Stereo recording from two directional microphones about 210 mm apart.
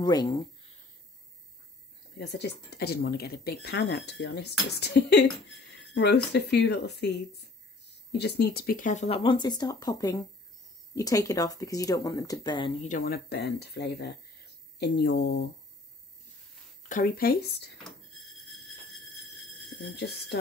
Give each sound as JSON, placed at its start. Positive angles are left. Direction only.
{"t": 0.0, "sound": "speech", "side_deg": 20}
{"t": 2.1, "sound": "speech", "side_deg": 50}
{"t": 12.8, "sound": "speech", "side_deg": 40}
{"t": 16.9, "sound": "speech", "side_deg": 45}
{"t": 18.2, "sound": "a sound", "side_deg": 0}
{"t": 20.0, "sound": "speech", "side_deg": 50}